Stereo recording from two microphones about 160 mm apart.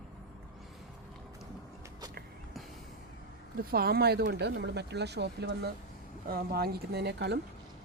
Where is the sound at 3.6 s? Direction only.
70° right (ahead or behind); by 5.7 s 90° right.